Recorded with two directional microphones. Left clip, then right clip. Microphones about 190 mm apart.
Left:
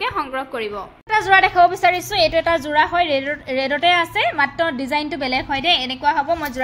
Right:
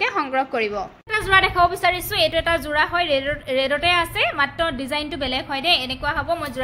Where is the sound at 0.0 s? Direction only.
15° right (ahead or behind).